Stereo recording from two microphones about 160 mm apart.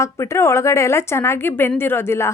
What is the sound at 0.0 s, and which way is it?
A woman's voice, 15° left (ahead or behind).